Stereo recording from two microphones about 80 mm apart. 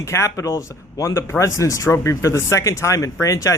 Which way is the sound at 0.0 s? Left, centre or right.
Left.